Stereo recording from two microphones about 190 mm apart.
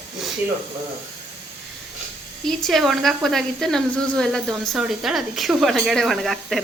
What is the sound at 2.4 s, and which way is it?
Speech, centre (ahead or behind).